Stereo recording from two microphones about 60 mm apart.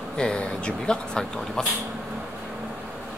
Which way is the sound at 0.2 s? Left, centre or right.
Centre.